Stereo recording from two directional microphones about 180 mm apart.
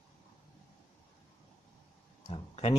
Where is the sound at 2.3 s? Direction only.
30° left (ahead or behind).